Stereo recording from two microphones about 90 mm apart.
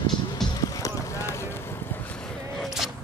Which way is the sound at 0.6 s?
35° left (ahead or behind).